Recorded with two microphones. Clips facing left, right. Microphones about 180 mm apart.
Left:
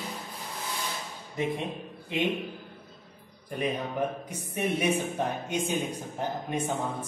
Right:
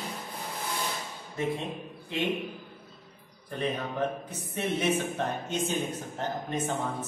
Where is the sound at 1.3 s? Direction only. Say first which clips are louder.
Left 1 dB; 15° left (ahead or behind).